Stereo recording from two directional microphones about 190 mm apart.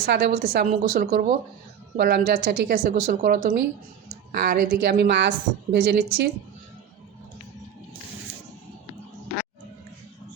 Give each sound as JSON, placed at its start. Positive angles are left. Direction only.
{"t": 0.0, "sound": "a woman's voice", "side_deg": -60}
{"t": 0.7, "sound": "a woman's voice", "side_deg": -50}